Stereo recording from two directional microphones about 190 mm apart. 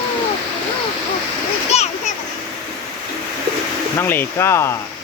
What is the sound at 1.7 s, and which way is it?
Splash, 35° left (ahead or behind).